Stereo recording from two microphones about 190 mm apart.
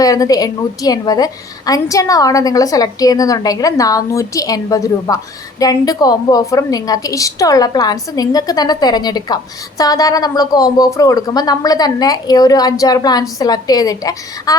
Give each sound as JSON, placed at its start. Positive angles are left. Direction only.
{"t": 0.0, "sound": "a woman's voice", "side_deg": 20}